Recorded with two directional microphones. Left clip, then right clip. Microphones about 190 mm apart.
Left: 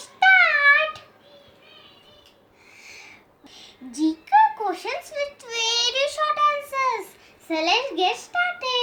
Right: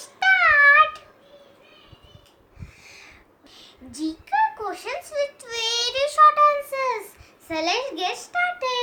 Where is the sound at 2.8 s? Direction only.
10° right (ahead or behind).